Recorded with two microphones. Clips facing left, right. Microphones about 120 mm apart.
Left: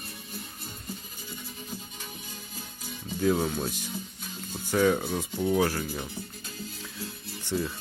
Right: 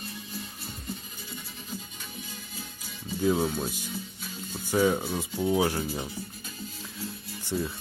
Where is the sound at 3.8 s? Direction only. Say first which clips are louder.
Even; 45° left (ahead or behind).